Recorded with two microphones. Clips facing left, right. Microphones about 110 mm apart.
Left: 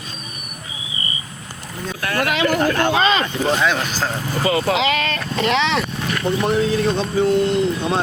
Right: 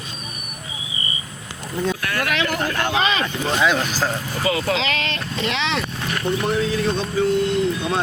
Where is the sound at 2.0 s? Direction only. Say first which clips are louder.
Left 3 dB; 35° left (ahead or behind).